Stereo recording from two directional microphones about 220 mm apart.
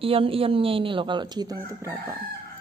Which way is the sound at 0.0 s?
25° right (ahead or behind).